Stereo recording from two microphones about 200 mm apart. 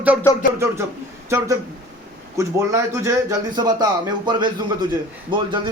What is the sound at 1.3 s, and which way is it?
A man's voice, 15° right (ahead or behind).